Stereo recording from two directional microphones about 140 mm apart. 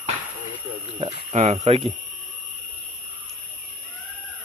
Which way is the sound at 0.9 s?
45° right (ahead or behind).